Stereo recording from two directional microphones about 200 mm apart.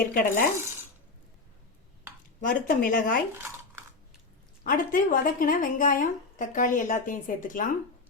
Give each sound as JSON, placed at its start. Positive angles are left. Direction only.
{"t": 0.1, "sound": "speech", "side_deg": 45}
{"t": 2.4, "sound": "speech", "side_deg": 40}
{"t": 3.3, "sound": "a sound", "side_deg": -10}
{"t": 4.6, "sound": "speech", "side_deg": 45}